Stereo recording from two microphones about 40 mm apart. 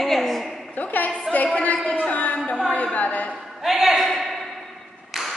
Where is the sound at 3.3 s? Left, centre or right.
Centre.